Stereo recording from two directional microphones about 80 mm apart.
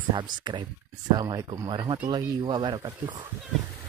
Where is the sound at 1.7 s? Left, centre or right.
Right.